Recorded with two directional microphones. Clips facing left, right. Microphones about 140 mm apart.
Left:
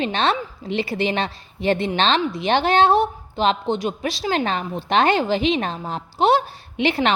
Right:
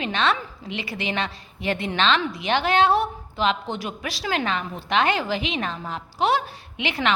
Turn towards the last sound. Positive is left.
turn(degrees=30)  # may be behind; listen again after turning